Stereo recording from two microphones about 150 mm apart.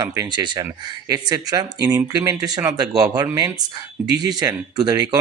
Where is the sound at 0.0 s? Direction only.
25° right (ahead or behind).